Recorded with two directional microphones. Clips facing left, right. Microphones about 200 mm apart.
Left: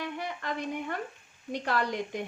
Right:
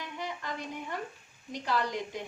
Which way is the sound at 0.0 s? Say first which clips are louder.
Left 3 dB; 55° left (ahead or behind).